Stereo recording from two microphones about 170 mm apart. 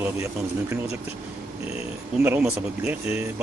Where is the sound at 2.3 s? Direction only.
10° right (ahead or behind).